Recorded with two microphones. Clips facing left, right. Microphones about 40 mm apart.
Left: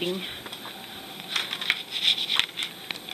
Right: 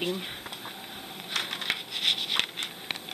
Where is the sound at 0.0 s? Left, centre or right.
Centre.